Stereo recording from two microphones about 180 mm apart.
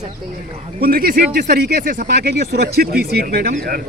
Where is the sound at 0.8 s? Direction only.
55° right (ahead or behind).